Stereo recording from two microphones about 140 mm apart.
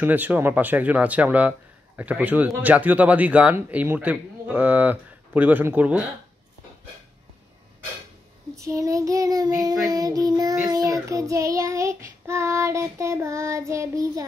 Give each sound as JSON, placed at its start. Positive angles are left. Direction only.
{"t": 0.0, "sound": "speech", "side_deg": -10}
{"t": 8.5, "sound": "child singing", "side_deg": -25}